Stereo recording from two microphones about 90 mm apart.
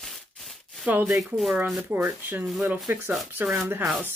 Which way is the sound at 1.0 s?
Centre (ahead or behind).